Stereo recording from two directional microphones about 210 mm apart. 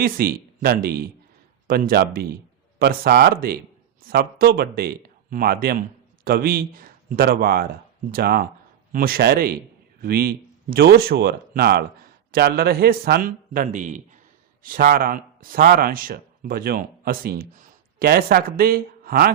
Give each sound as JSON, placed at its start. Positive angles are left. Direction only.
{"t": 0.0, "sound": "a man's voice", "side_deg": -45}